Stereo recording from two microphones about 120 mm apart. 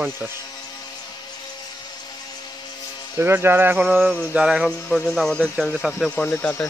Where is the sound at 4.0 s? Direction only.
Centre (ahead or behind).